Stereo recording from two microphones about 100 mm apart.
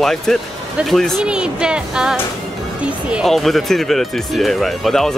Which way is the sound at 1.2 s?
10° right (ahead or behind).